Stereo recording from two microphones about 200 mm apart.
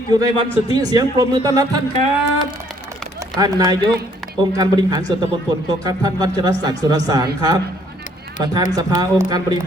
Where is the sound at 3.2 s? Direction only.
20° right (ahead or behind).